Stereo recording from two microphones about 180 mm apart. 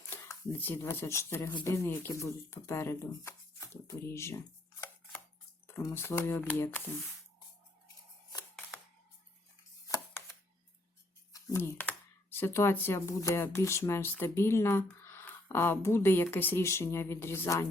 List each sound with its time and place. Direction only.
0.1 s speech: 15° left (ahead or behind)
9.8 s chopping: 20° left (ahead or behind)
11.3 s speech: 15° left (ahead or behind)